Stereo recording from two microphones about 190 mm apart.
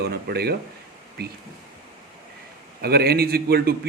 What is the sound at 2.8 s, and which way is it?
Speech, 55° right (ahead or behind).